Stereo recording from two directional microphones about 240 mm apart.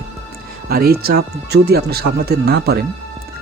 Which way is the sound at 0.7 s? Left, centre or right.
Right.